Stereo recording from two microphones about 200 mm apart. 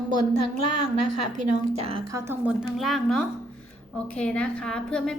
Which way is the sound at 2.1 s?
15° right (ahead or behind).